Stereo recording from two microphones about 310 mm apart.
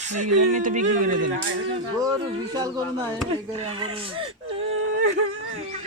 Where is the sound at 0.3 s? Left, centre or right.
Right.